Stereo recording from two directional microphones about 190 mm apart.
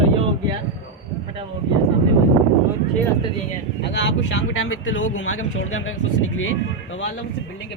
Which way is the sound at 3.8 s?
65° left (ahead or behind).